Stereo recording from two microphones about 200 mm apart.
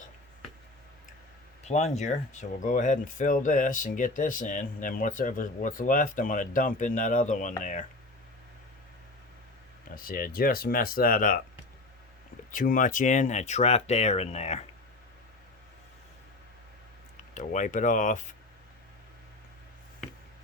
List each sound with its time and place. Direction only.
1.6 s speech: 35° left (ahead or behind)
9.9 s speech: 45° left (ahead or behind)
12.5 s speech: 40° left (ahead or behind)
17.3 s speech: 40° left (ahead or behind)